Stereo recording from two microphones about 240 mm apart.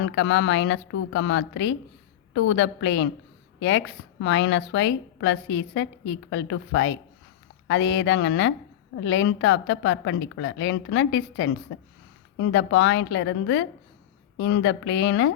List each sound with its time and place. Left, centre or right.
0.0 s a woman's voice: left